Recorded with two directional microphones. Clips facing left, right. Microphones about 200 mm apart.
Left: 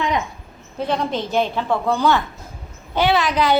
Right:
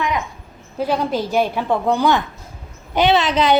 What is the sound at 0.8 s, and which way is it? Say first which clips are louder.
A woman's voice: right 2 dB; 5° right (ahead or behind).